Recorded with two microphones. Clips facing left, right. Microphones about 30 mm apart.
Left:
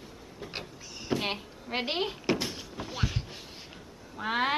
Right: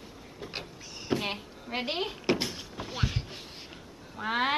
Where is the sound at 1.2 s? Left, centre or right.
Centre.